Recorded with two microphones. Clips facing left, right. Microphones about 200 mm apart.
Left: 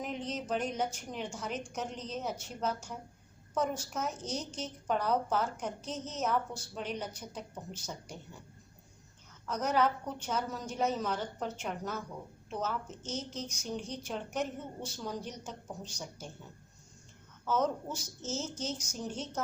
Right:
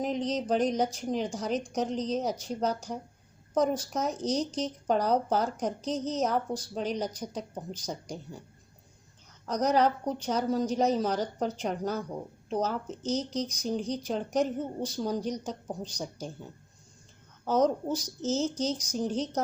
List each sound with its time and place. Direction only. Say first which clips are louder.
0.0 s a woman's voice: right 8 dB; 35° right (ahead or behind)
9.5 s a woman's voice: right 5 dB; 35° right (ahead or behind)
17.4 s a woman's voice: right 6 dB; 35° right (ahead or behind)